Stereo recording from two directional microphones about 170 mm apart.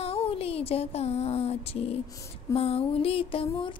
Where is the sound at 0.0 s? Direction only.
35° left (ahead or behind).